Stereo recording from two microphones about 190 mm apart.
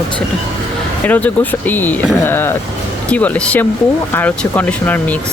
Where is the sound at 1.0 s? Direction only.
10° left (ahead or behind).